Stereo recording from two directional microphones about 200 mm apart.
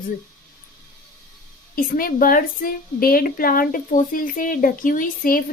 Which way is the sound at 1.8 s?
45° left (ahead or behind).